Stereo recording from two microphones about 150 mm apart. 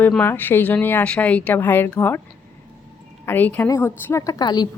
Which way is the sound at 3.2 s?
10° left (ahead or behind).